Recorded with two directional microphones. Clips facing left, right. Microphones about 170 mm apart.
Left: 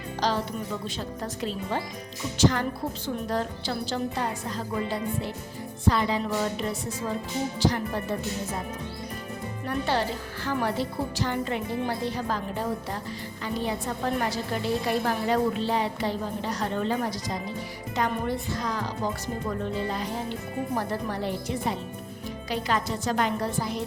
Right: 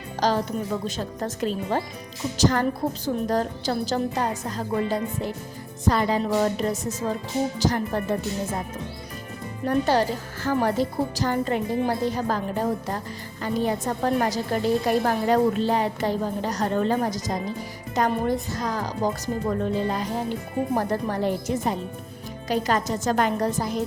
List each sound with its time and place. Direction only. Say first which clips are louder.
0.2 s a woman's voice: right 4 dB; 45° right (ahead or behind)
9.6 s a woman's voice: right 6 dB; 40° right (ahead or behind)